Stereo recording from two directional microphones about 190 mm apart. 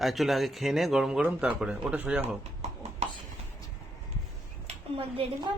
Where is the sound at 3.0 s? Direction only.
35° right (ahead or behind).